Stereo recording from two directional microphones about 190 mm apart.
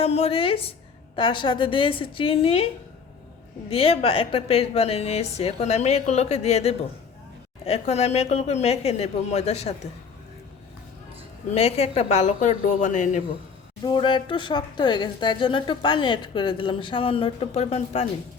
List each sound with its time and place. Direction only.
0.0 s speech: 30° left (ahead or behind)
3.7 s a woman's voice: 30° left (ahead or behind)
11.5 s a woman's voice: 35° left (ahead or behind)
13.8 s speech: 25° left (ahead or behind)